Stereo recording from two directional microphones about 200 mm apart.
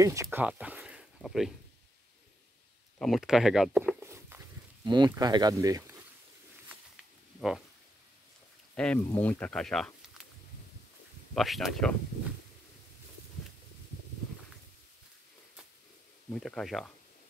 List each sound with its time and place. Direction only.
0.0 s speech: 15° right (ahead or behind)
3.0 s speech: centre (ahead or behind)
4.0 s walk: 15° right (ahead or behind)
4.8 s speech: 20° right (ahead or behind)
7.3 s speech: centre (ahead or behind)
8.7 s speech: 5° left (ahead or behind)
11.3 s speech: centre (ahead or behind)
16.3 s speech: centre (ahead or behind)